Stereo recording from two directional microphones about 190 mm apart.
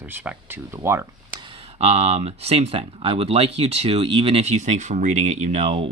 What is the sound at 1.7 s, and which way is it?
Speech, 30° right (ahead or behind).